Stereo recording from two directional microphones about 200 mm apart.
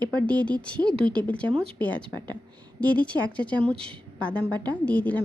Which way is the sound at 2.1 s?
20° right (ahead or behind).